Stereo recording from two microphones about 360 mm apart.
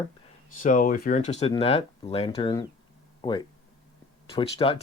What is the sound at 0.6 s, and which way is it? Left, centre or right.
Speech, left.